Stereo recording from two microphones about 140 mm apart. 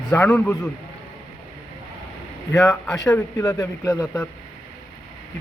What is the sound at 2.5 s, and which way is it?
Speech, 20° left (ahead or behind).